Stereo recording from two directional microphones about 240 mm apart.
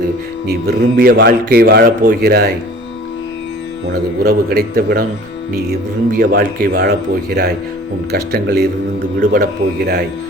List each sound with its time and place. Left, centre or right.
0.4 s a man's voice: right
4.2 s a man's voice: right
6.1 s a man's voice: right